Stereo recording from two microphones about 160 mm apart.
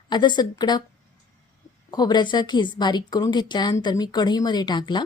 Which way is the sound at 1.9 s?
25° left (ahead or behind).